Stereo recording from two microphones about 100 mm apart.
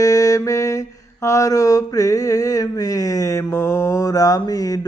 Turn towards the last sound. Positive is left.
turn(degrees=35)  # may be behind; listen again after turning